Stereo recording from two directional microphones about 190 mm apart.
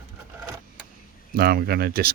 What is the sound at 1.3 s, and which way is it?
Speech, 55° right (ahead or behind).